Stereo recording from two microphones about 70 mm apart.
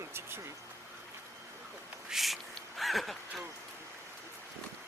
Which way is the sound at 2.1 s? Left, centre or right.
Centre.